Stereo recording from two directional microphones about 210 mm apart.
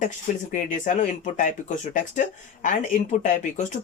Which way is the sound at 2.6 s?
35° left (ahead or behind).